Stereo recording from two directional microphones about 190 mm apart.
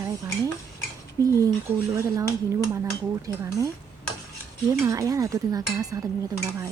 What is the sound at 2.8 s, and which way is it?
Speech, 15° right (ahead or behind).